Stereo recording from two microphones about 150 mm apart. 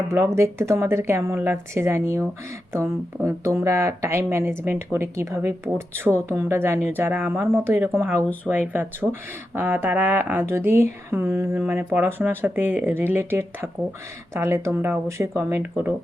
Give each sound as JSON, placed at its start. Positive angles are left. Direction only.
{"t": 0.1, "sound": "speech", "side_deg": -20}